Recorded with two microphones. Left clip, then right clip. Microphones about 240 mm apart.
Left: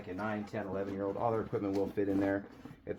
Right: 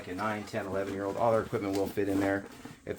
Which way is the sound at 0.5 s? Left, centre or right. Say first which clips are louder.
Right 4 dB; right.